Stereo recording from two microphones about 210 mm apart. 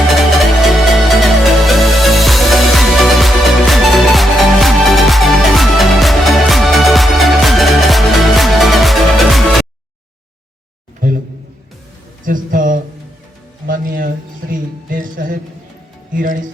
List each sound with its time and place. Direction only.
0.9 s music: centre (ahead or behind)
12.2 s a sound: 40° right (ahead or behind)
16.1 s speech: 40° right (ahead or behind)